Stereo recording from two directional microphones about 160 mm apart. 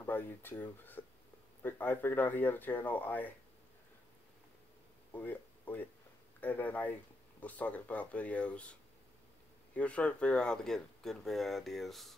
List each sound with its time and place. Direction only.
0.0 s speech: 10° left (ahead or behind)
5.1 s speech: 10° left (ahead or behind)
9.8 s speech: 10° left (ahead or behind)